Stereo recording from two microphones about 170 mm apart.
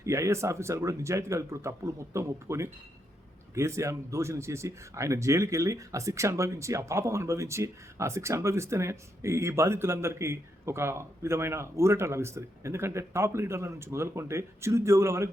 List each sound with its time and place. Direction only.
0.0 s speech: 15° right (ahead or behind)